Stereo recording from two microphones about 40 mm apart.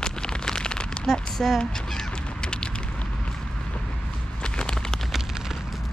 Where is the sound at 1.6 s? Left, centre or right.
Left.